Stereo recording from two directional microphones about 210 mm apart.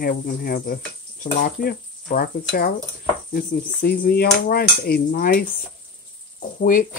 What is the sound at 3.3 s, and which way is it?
Speech, 45° left (ahead or behind).